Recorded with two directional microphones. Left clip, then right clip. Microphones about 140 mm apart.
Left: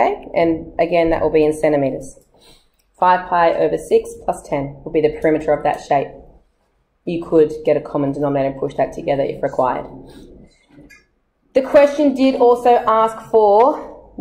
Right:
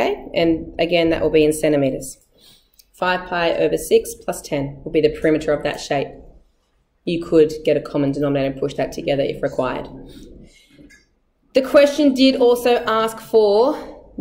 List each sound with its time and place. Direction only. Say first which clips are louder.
0.4 s speech: left 2 dB; 50° right (ahead or behind)
3.0 s speech: left 6 dB; 35° right (ahead or behind)
7.1 s speech: left 1 dB; 45° right (ahead or behind)
11.5 s speech: left 1 dB; 40° right (ahead or behind)